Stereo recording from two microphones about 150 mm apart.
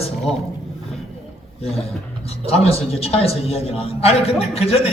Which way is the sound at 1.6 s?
40° left (ahead or behind).